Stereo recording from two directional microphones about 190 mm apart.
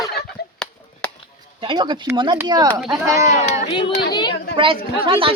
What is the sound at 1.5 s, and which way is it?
Speech, 25° right (ahead or behind).